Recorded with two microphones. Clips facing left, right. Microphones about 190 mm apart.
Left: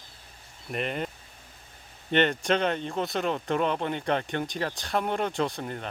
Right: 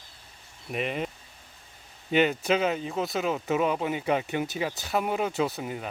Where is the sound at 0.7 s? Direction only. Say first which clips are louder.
Right 1 dB; centre (ahead or behind).